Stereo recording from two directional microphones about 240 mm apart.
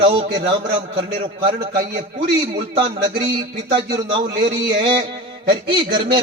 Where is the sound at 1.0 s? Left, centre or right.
Centre.